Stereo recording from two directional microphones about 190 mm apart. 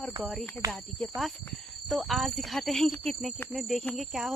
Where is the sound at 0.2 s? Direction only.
Centre (ahead or behind).